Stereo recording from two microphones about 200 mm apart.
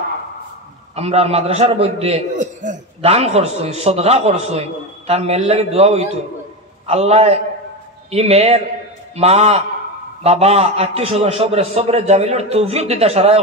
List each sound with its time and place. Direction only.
0.9 s a man's voice: 30° right (ahead or behind)